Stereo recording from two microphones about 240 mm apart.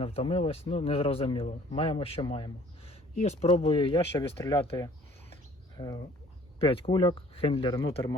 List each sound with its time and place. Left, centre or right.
0.0 s speech: left